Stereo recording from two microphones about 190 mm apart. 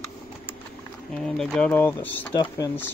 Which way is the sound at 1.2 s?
5° left (ahead or behind).